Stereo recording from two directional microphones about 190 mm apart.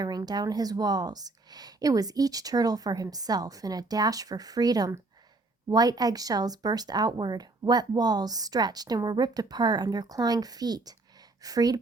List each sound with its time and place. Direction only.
0.0 s speech: 20° right (ahead or behind)